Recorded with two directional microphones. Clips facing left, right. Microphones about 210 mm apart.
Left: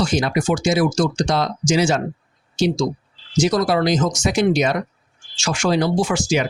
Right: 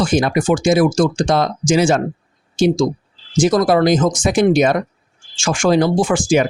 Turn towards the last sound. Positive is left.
turn(degrees=-50)  # may be behind; listen again after turning